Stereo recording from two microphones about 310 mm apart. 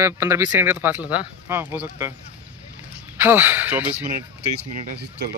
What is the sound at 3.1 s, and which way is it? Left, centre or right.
Speech, centre.